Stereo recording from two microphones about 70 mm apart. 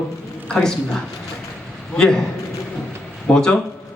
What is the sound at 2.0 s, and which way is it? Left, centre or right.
Speech, centre.